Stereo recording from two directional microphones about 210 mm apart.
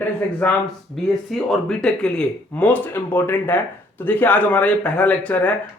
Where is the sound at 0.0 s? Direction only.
5° left (ahead or behind).